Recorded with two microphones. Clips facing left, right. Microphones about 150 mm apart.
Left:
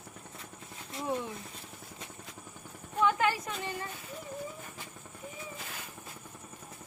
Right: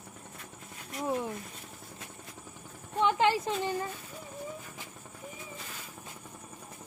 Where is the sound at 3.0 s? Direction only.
25° right (ahead or behind).